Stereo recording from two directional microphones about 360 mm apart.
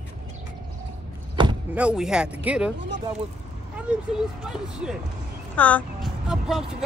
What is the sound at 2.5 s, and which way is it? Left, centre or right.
Speech, centre.